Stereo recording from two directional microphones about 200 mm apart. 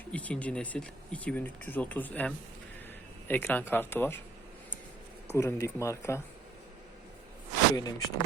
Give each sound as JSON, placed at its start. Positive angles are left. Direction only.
{"t": 0.1, "sound": "speech", "side_deg": 5}
{"t": 5.3, "sound": "speech", "side_deg": 15}
{"t": 7.8, "sound": "speech", "side_deg": 20}